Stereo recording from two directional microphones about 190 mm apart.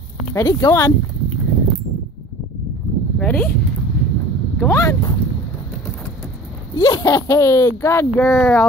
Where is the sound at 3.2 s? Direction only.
10° left (ahead or behind).